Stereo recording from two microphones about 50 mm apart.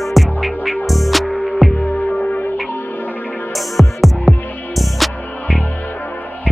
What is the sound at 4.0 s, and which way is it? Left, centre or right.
Music, centre.